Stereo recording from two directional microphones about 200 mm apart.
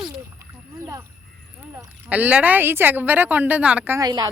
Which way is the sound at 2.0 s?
5° right (ahead or behind).